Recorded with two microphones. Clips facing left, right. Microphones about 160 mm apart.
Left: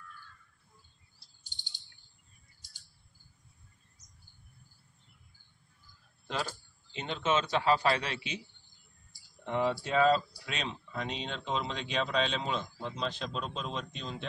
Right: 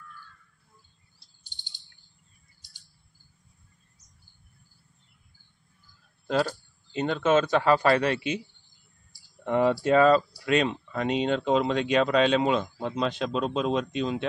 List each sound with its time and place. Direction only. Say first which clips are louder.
6.2 s speech: right 10 dB; 45° right (ahead or behind)
9.4 s speech: right 8 dB; 55° right (ahead or behind); by 14.2 s 70° right (ahead or behind)